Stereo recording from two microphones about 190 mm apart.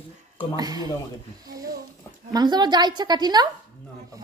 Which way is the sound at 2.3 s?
20° right (ahead or behind).